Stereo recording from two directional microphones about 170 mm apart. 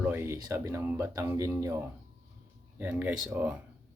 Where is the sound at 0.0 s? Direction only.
10° right (ahead or behind).